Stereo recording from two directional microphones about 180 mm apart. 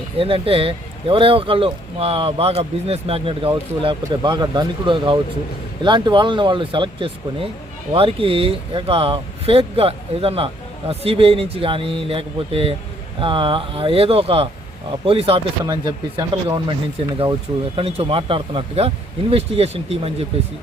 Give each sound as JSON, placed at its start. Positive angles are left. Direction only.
{"t": 0.2, "sound": "speech", "side_deg": -30}
{"t": 17.7, "sound": "speech", "side_deg": -30}